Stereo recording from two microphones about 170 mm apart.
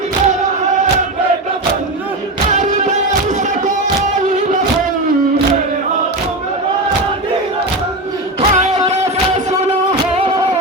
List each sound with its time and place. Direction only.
2.5 s music: 45° right (ahead or behind)
8.4 s music: 40° right (ahead or behind)